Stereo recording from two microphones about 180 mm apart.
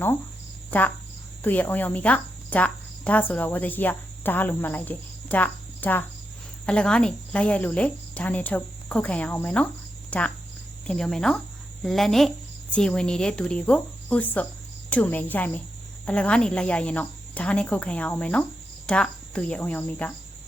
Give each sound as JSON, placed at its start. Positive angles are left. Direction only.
{"t": 0.7, "sound": "a woman's voice", "side_deg": 10}